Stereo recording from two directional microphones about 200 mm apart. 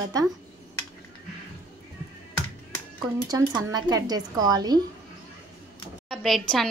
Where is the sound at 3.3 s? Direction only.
20° right (ahead or behind).